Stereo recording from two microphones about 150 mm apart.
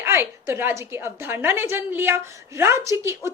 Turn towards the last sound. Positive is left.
turn(degrees=-15)  # may be behind; listen again after turning